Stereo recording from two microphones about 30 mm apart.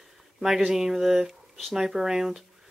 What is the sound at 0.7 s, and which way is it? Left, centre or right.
Speech, centre.